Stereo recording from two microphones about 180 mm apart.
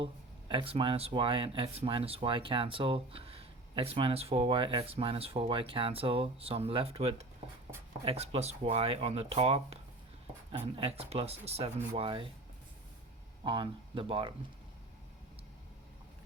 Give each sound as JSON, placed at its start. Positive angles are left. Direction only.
{"t": 0.0, "sound": "speech", "side_deg": -30}
{"t": 10.8, "sound": "speech", "side_deg": -35}
{"t": 13.4, "sound": "speech", "side_deg": -25}